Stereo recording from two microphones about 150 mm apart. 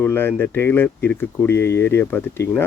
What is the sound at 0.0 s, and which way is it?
Speech, 15° left (ahead or behind).